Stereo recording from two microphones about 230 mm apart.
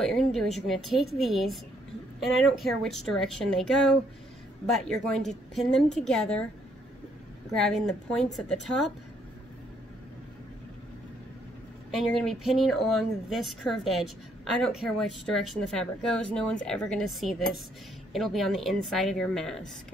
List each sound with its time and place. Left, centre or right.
0.0 s speech: centre
7.5 s speech: centre
12.0 s speech: centre